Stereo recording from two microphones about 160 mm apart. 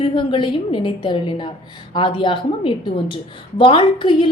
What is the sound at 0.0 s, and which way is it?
A woman's voice, 30° left (ahead or behind).